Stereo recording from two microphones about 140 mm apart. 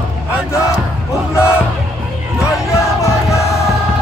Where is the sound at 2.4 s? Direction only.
20° left (ahead or behind).